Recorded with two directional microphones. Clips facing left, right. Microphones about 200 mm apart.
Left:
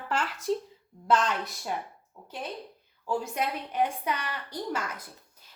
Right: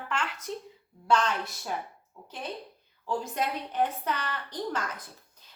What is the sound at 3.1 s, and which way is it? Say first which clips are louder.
A woman's voice: left 1 dB; 10° left (ahead or behind).